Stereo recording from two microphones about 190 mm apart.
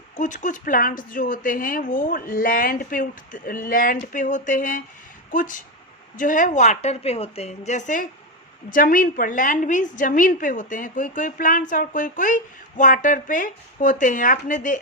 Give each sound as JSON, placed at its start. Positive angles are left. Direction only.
{"t": 0.2, "sound": "a woman's voice", "side_deg": 40}